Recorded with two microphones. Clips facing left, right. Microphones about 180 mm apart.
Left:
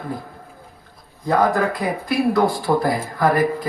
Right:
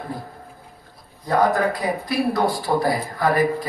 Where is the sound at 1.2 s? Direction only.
50° left (ahead or behind).